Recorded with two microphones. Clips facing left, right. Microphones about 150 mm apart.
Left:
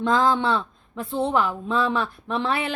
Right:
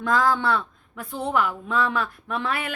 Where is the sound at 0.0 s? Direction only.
25° left (ahead or behind).